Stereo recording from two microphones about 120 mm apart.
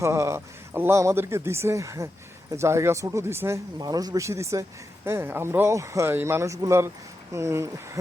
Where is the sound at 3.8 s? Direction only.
35° right (ahead or behind).